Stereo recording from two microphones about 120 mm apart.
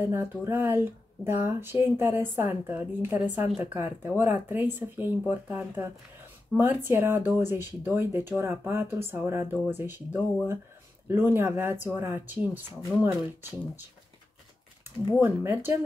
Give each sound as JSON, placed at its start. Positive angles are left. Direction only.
{"t": 0.0, "sound": "speech", "side_deg": -20}
{"t": 15.1, "sound": "speech", "side_deg": -15}